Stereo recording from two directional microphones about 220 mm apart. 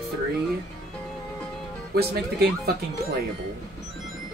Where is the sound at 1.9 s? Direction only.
45° right (ahead or behind).